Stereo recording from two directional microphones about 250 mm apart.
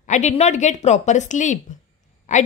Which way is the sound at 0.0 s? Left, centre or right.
Left.